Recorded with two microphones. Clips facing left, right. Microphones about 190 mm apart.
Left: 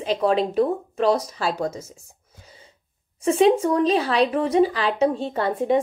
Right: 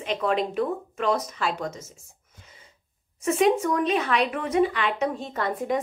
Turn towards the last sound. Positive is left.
turn(degrees=30)  # may be behind; listen again after turning